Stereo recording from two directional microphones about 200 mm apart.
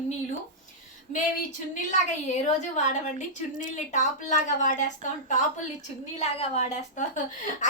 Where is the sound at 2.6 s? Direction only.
35° left (ahead or behind).